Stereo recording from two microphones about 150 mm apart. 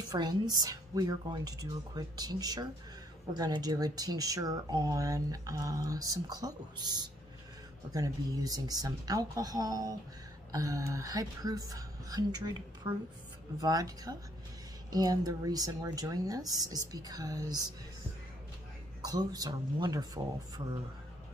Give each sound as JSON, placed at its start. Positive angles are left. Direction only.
{"t": 0.1, "sound": "a woman's voice", "side_deg": -25}
{"t": 18.9, "sound": "speech", "side_deg": -25}